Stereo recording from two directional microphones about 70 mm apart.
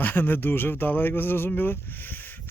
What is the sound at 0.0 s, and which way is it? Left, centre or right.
Speech, left.